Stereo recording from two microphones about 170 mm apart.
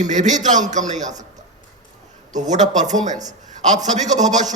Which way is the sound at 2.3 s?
45° right (ahead or behind).